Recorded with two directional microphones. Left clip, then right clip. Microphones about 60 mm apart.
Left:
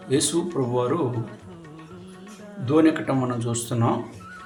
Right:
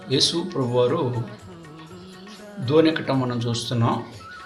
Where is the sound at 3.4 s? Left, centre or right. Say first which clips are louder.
Right 1 dB; left.